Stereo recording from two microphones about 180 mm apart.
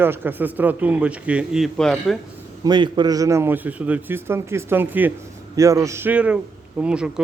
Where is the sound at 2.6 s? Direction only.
25° right (ahead or behind).